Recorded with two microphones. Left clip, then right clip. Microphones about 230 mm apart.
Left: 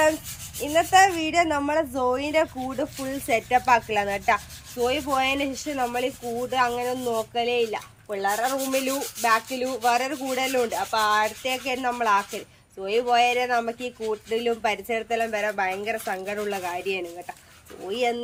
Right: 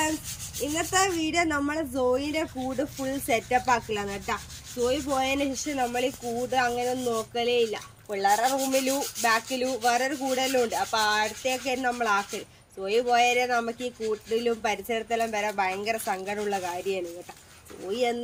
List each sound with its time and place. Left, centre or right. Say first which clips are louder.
0.6 s speech: left 8 dB; centre